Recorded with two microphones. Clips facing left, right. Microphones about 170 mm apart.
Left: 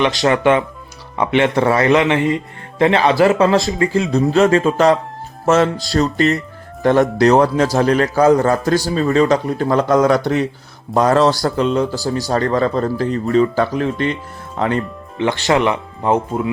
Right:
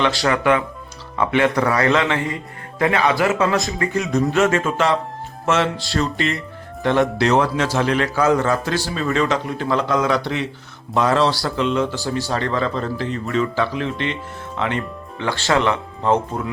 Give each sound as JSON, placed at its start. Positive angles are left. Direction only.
{"t": 0.0, "sound": "a man's voice", "side_deg": 20}
{"t": 15.2, "sound": "speech", "side_deg": 15}